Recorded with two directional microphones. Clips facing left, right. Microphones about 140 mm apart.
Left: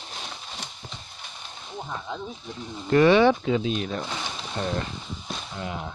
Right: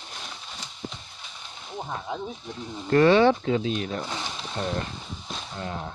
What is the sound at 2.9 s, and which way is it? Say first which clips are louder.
Speech: even; 15° left (ahead or behind).